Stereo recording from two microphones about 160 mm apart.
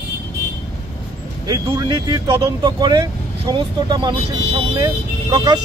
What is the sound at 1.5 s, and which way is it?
Speech, 25° right (ahead or behind).